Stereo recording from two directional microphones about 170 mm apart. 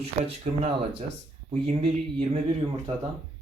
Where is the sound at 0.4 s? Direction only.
40° right (ahead or behind).